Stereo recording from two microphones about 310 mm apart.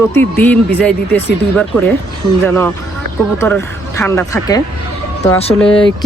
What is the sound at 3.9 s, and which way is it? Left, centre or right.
Speech, centre.